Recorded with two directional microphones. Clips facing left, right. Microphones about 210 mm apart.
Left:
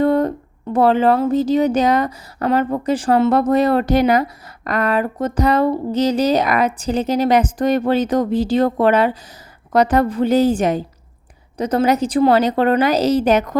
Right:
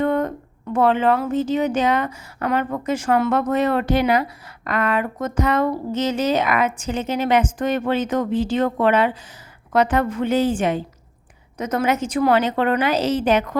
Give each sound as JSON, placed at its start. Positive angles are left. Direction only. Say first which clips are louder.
{"t": 0.0, "sound": "speech", "louder": "left 5 dB", "side_deg": 35}